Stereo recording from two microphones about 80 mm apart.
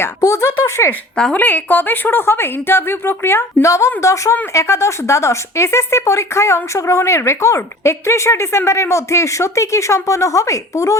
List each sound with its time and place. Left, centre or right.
0.2 s speech: left
1.1 s a woman's voice: centre; by 10.9 s left